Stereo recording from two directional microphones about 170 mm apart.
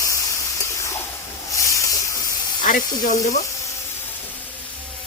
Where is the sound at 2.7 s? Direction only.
55° left (ahead or behind).